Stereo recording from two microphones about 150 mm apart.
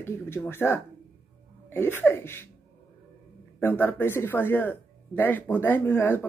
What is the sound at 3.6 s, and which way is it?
A woman's voice, 15° left (ahead or behind).